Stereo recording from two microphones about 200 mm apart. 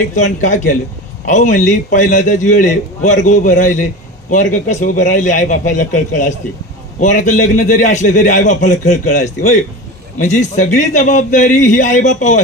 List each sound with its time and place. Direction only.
0.1 s a man's voice: 35° left (ahead or behind)